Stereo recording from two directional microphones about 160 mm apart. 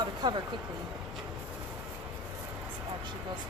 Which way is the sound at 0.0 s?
25° right (ahead or behind).